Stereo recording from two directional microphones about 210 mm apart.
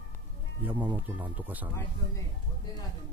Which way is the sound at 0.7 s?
10° right (ahead or behind).